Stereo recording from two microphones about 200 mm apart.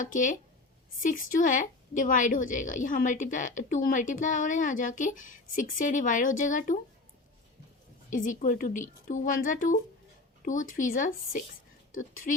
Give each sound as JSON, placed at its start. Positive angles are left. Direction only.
{"t": 0.0, "sound": "a woman's voice", "side_deg": 40}
{"t": 8.1, "sound": "a woman's voice", "side_deg": 40}